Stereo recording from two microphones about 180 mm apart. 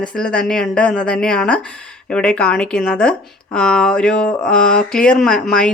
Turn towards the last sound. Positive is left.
turn(degrees=5)  # may be behind; listen again after turning